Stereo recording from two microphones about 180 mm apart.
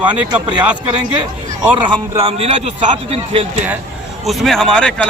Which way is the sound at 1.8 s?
30° right (ahead or behind).